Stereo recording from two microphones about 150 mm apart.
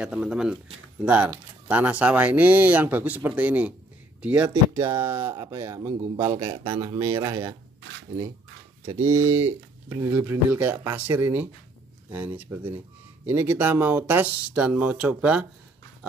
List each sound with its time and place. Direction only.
0.0 s speech: 5° right (ahead or behind)
6.4 s speech: 30° right (ahead or behind)
8.8 s speech: 20° right (ahead or behind)